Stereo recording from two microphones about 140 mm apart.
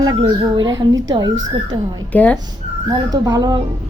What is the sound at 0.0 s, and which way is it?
Speech, 30° right (ahead or behind).